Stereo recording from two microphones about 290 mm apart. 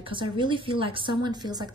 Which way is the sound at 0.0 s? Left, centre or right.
Centre.